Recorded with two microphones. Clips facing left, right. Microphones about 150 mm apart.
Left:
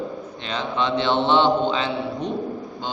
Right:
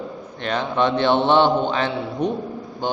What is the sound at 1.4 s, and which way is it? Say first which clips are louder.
Mantra: right 1 dB; 55° right (ahead or behind).